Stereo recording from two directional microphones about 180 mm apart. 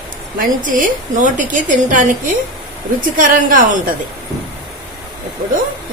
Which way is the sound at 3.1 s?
50° right (ahead or behind).